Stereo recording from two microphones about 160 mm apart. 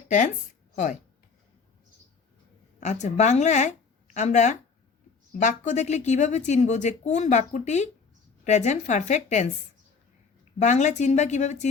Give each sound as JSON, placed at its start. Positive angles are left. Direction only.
{"t": 2.8, "sound": "a woman's voice", "side_deg": 45}
{"t": 10.6, "sound": "a woman's voice", "side_deg": 45}